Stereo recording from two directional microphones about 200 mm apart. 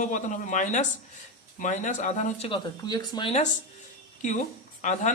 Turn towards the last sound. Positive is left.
turn(degrees=40)  # may be behind; listen again after turning